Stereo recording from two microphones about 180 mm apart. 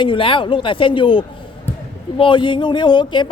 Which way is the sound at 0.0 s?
30° left (ahead or behind).